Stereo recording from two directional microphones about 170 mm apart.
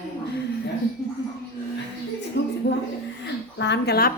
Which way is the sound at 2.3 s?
90° left.